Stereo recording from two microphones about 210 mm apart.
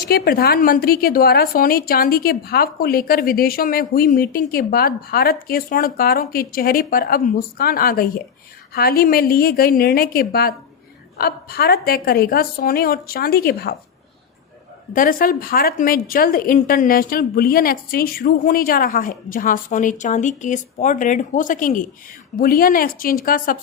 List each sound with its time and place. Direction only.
0.1 s a woman's voice: 45° left (ahead or behind)
14.9 s a woman's voice: 40° left (ahead or behind)